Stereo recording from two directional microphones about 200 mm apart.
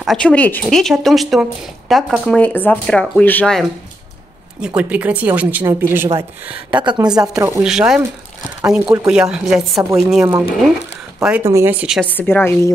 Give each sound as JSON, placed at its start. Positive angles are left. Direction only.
{"t": 0.0, "sound": "speech", "side_deg": 5}
{"t": 4.6, "sound": "a woman's voice", "side_deg": -5}
{"t": 7.6, "sound": "a woman's voice", "side_deg": -5}
{"t": 11.2, "sound": "a woman's voice", "side_deg": -10}
{"t": 12.1, "sound": "a woman's voice", "side_deg": 10}